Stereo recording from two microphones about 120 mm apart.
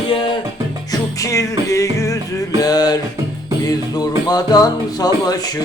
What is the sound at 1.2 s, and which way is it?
Music, 25° left (ahead or behind).